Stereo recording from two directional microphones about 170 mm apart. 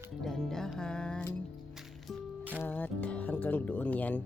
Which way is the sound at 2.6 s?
10° left (ahead or behind).